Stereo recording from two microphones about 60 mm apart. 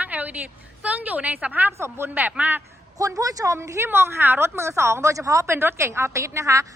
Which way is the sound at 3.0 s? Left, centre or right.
Right.